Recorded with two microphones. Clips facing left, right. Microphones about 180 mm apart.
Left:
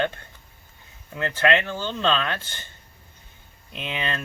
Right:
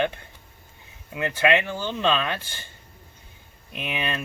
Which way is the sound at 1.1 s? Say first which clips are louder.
Even; 15° right (ahead or behind).